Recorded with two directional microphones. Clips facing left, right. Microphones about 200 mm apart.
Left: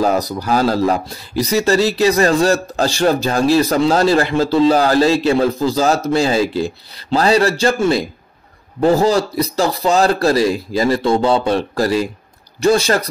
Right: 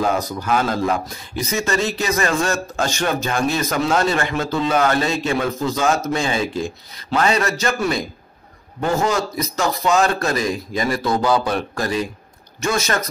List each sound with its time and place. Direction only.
0.0 s speech: 35° left (ahead or behind)